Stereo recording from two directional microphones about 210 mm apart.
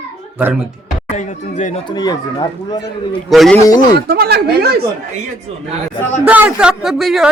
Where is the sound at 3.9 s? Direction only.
50° right (ahead or behind).